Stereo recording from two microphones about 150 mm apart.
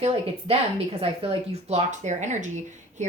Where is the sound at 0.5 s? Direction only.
45° right (ahead or behind).